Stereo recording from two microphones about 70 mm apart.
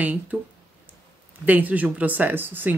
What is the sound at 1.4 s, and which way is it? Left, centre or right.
Speech, right.